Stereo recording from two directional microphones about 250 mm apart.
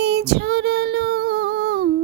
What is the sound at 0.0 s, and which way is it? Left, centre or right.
Female singing, right.